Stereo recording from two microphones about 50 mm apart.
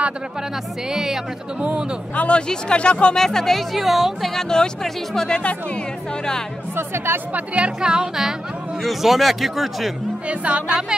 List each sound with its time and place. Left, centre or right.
0.9 s speech: centre
2.1 s speech: left
3.2 s speech: centre
4.4 s speech: centre
6.8 s speech: right
7.3 s speech: right
8.8 s speech: centre
10.2 s speech: right